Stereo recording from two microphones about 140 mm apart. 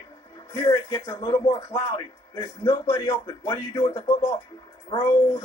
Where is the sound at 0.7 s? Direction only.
25° left (ahead or behind).